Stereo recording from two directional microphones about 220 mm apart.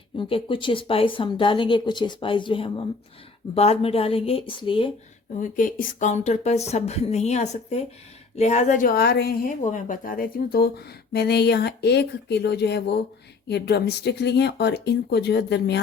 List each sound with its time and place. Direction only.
0.2 s speech: 25° left (ahead or behind)
5.4 s a woman's voice: 40° left (ahead or behind)